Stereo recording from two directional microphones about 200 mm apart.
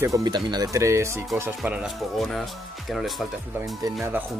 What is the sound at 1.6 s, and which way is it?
Speech, 5° right (ahead or behind).